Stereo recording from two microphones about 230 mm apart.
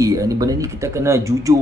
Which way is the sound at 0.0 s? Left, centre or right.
Centre.